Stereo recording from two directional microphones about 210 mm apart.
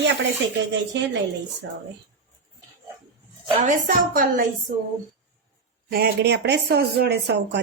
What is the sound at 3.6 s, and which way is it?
Speech, 40° right (ahead or behind).